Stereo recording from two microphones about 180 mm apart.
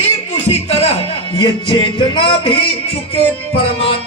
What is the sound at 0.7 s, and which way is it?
Music, 35° left (ahead or behind).